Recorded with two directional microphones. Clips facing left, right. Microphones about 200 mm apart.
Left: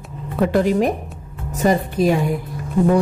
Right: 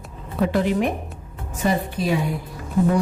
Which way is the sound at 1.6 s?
40° left (ahead or behind).